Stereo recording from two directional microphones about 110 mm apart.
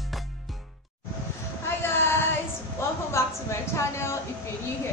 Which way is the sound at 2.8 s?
25° left (ahead or behind).